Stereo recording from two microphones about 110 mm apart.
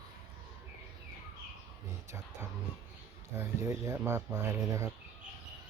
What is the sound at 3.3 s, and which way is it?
Speech, 25° right (ahead or behind).